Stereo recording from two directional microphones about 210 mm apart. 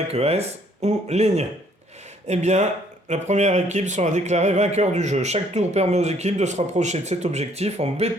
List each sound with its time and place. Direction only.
0.1 s speech: 30° right (ahead or behind)